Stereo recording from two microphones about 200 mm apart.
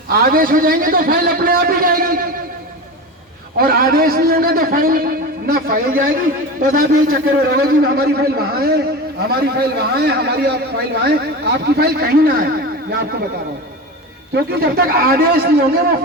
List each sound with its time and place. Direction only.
0.1 s a man's voice: 50° right (ahead or behind)
3.6 s a man's voice: 50° right (ahead or behind)
14.3 s a man's voice: 50° right (ahead or behind)